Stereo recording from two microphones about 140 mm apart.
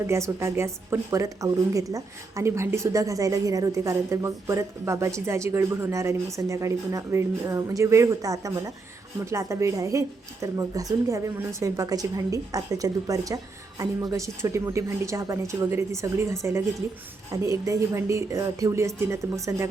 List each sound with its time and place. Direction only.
0.1 s speech: 20° right (ahead or behind)